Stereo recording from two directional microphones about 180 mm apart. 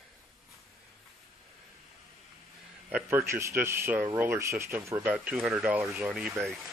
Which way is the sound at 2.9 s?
15° right (ahead or behind).